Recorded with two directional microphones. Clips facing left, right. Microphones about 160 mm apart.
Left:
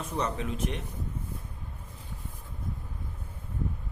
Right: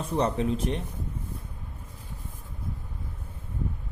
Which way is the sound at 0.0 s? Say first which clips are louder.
Right 6 dB; 30° right (ahead or behind).